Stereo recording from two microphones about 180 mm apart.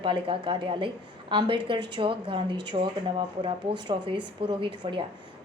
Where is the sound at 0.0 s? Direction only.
25° right (ahead or behind).